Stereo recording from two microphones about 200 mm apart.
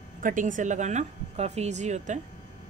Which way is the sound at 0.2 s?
40° right (ahead or behind).